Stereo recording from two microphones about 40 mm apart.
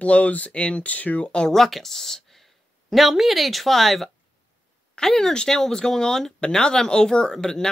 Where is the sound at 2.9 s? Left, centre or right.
Centre.